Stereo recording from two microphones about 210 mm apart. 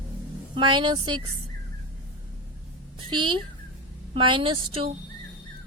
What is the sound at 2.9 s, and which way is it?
A woman's voice, 25° right (ahead or behind).